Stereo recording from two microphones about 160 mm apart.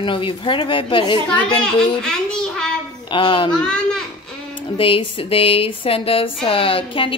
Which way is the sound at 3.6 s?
5° left (ahead or behind).